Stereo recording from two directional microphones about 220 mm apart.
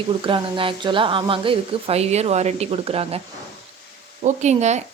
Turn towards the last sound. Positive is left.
turn(degrees=-30)  # may be behind; listen again after turning